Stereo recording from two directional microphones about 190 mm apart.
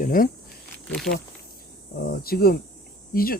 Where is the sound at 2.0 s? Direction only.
50° left (ahead or behind).